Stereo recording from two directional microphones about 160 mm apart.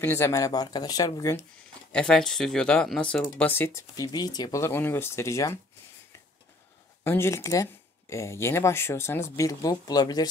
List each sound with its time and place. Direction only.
0.0 s speech: 15° left (ahead or behind)
1.9 s speech: 5° left (ahead or behind)
7.0 s speech: 15° left (ahead or behind)